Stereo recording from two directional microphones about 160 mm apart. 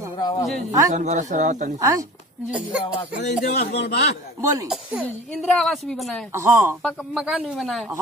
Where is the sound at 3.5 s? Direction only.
80° left.